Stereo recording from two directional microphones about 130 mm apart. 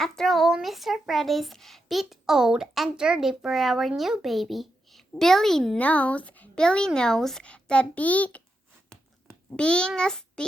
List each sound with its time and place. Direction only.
0.0 s speech: centre (ahead or behind)
8.9 s a sound: 5° left (ahead or behind)
9.6 s child singing: 10° left (ahead or behind)